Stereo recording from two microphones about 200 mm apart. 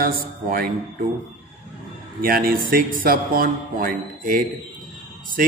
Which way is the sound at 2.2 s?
45° right (ahead or behind).